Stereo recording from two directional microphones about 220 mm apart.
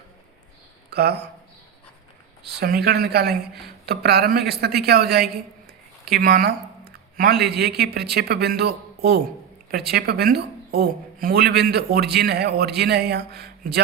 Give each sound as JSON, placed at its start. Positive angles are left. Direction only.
{"t": 0.9, "sound": "speech", "side_deg": -45}
{"t": 2.4, "sound": "a woman's voice", "side_deg": -45}